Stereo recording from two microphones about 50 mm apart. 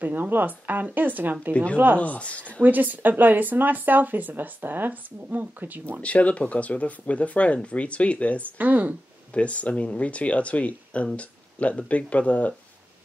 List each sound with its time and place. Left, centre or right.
0.0 s speech: right
1.5 s speech: left
2.6 s speech: right
6.0 s speech: left
8.5 s speech: right
9.3 s speech: left